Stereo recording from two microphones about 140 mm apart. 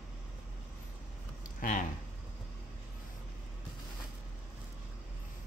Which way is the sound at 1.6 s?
75° left (ahead or behind).